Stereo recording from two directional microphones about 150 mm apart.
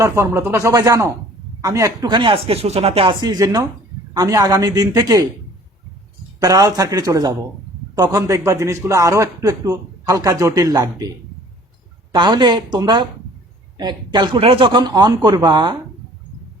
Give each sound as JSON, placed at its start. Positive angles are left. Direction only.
{"t": 0.0, "sound": "a man's voice", "side_deg": -20}
{"t": 6.4, "sound": "a man's voice", "side_deg": -25}
{"t": 12.1, "sound": "a man's voice", "side_deg": -30}